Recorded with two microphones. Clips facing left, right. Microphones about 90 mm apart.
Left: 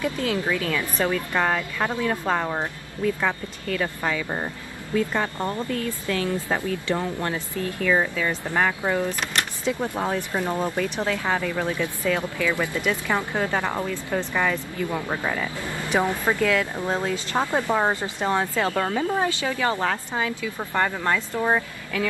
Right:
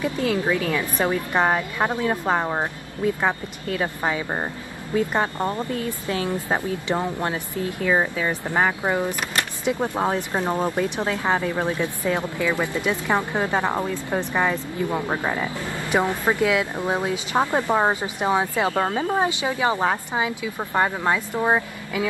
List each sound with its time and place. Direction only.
0.0 s speech: 20° right (ahead or behind)